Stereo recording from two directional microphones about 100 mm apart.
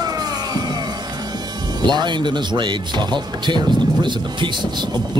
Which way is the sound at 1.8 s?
45° right (ahead or behind).